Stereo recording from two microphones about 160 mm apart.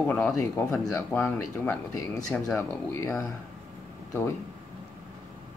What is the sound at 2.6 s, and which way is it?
Speech, 15° left (ahead or behind).